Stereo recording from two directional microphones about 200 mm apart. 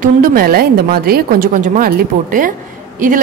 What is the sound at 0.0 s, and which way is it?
A woman's voice, 45° right (ahead or behind).